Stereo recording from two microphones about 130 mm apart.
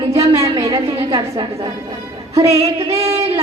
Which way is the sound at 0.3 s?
30° right (ahead or behind).